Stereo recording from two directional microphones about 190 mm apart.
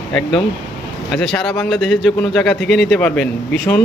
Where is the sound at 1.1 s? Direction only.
Centre (ahead or behind).